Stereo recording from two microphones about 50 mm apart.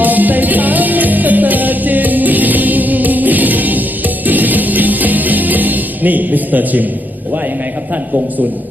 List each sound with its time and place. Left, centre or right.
0.0 s music: right